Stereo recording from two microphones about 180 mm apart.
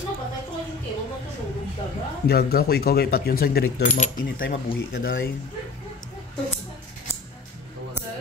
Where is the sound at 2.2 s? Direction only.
60° left (ahead or behind).